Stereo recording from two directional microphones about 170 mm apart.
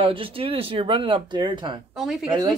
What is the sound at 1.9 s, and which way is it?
Speech, centre (ahead or behind).